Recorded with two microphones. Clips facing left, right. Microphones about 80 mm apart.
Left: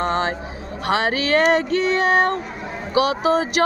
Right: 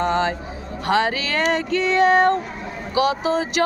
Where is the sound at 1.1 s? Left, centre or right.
Left.